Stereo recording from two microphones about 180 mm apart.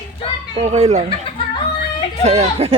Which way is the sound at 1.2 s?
25° left (ahead or behind).